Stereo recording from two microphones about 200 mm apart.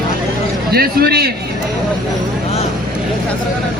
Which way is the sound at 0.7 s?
50° right (ahead or behind).